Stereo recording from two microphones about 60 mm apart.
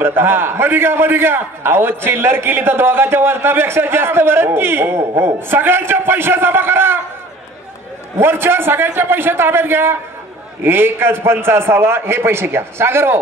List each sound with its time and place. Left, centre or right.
0.0 s a man's voice: right
8.2 s a man's voice: right